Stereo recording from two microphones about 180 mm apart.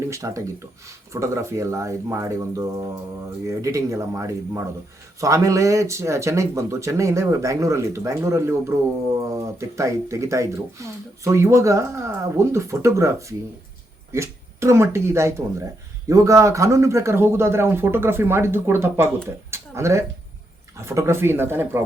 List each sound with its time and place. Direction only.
0.1 s speech: 15° right (ahead or behind)
19.5 s a sound: 15° right (ahead or behind)
20.8 s speech: 15° right (ahead or behind)